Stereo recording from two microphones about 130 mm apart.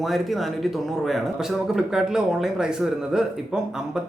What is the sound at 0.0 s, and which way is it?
Speech, centre (ahead or behind).